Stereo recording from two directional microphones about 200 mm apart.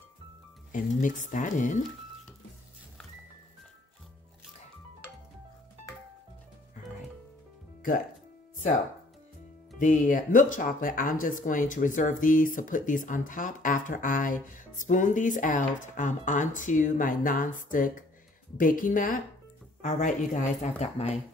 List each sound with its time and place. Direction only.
0.7 s speech: 40° left (ahead or behind)
9.8 s a woman's voice: 40° left (ahead or behind)